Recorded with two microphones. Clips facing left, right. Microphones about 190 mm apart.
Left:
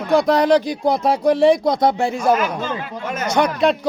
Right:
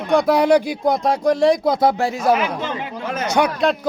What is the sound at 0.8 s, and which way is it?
A man's voice, 5° left (ahead or behind).